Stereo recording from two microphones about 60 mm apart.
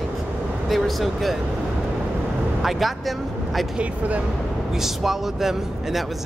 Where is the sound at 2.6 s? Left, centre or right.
Centre.